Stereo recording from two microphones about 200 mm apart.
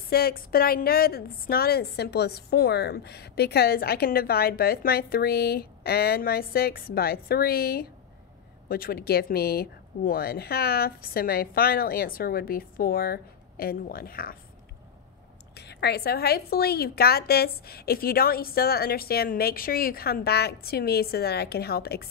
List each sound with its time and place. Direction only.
0.1 s a woman's voice: 50° left (ahead or behind)
15.5 s a woman's voice: 55° left (ahead or behind)